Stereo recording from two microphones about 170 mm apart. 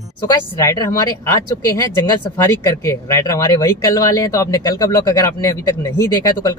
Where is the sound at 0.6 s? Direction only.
20° left (ahead or behind).